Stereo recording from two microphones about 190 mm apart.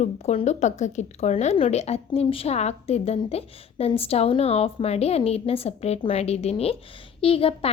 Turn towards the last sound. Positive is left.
turn(degrees=30)  # may be behind; listen again after turning